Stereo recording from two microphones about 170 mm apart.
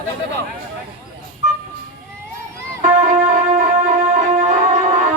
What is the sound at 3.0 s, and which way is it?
Music, 45° right (ahead or behind).